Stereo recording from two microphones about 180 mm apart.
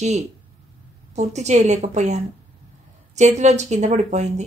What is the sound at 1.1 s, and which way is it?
Speech, 40° right (ahead or behind).